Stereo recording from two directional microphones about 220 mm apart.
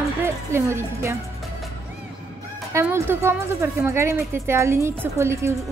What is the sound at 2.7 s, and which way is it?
A woman's voice, 10° right (ahead or behind).